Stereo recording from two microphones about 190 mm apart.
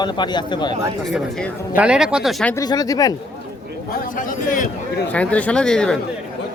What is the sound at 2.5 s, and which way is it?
Speech, 20° left (ahead or behind).